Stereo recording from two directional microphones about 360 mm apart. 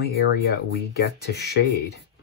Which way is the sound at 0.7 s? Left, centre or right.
Left.